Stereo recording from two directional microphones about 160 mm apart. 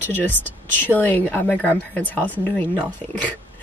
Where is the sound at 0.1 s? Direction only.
10° left (ahead or behind).